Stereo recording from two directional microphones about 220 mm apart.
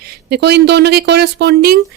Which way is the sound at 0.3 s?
50° right (ahead or behind).